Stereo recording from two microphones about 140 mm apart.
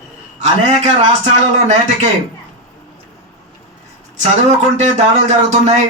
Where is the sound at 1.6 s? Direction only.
55° right (ahead or behind).